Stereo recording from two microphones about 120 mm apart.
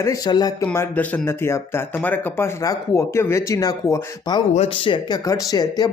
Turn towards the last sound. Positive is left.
turn(degrees=35)  # may be behind; listen again after turning